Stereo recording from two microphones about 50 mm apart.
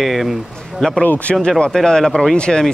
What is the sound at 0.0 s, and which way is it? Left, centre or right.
Speech, centre.